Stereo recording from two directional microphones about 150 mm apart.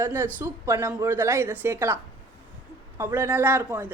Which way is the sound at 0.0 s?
15° right (ahead or behind).